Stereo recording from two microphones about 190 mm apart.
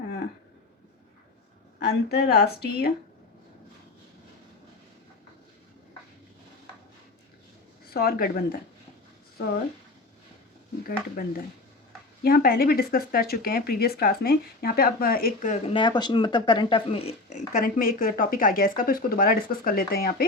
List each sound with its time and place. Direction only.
1.8 s speech: 55° left (ahead or behind)
7.9 s speech: 55° left (ahead or behind)
10.8 s speech: 50° left (ahead or behind)